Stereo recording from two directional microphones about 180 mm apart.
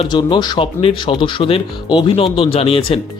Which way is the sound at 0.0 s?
25° left (ahead or behind).